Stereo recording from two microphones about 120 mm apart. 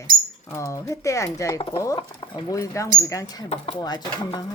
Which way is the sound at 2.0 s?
55° left (ahead or behind).